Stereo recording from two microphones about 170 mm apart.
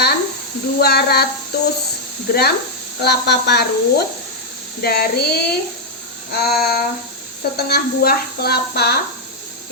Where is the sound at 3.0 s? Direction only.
75° left (ahead or behind).